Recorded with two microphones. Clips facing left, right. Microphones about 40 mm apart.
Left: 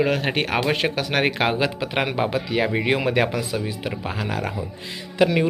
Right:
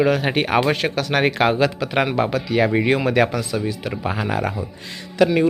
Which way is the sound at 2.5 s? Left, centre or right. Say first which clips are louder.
Right 5 dB; centre.